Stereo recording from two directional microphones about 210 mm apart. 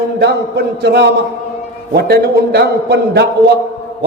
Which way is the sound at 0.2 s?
55° right (ahead or behind).